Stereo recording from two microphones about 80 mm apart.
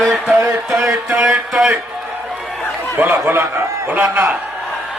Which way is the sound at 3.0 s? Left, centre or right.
Right.